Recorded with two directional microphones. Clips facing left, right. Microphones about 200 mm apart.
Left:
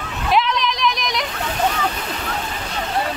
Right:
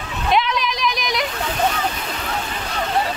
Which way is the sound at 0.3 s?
Centre (ahead or behind).